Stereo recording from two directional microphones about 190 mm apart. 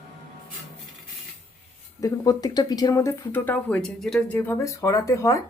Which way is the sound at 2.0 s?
20° left (ahead or behind).